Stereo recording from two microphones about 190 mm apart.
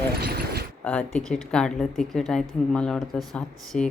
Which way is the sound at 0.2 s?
55° right (ahead or behind).